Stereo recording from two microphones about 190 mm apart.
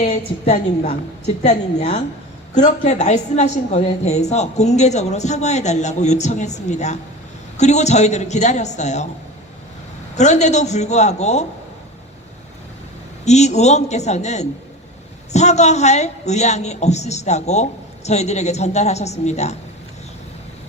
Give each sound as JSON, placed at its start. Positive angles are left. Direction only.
{"t": 0.0, "sound": "a woman's voice", "side_deg": 35}
{"t": 10.2, "sound": "a woman's voice", "side_deg": 35}
{"t": 13.2, "sound": "a woman's voice", "side_deg": 35}